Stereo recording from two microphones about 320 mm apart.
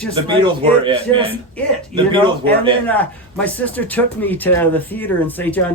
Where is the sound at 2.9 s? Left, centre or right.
Centre.